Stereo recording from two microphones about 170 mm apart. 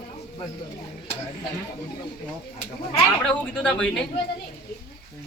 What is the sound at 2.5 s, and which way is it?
Speech, 35° left (ahead or behind).